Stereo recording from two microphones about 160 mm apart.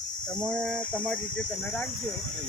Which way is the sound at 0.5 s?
5° left (ahead or behind).